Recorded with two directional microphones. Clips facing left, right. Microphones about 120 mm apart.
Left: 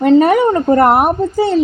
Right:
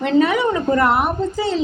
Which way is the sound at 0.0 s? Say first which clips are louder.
Left 7 dB; 50° left (ahead or behind).